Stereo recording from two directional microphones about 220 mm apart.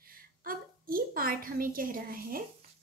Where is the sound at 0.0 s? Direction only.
40° right (ahead or behind).